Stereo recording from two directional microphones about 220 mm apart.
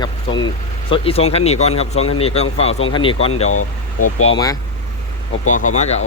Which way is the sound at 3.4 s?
80° left.